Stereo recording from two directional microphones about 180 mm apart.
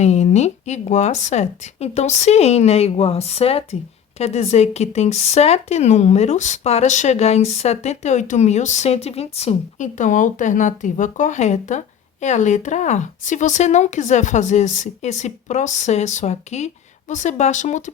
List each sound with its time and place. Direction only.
0.0 s speech: 40° left (ahead or behind)